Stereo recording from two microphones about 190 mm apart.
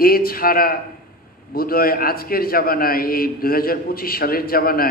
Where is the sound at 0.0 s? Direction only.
50° left (ahead or behind).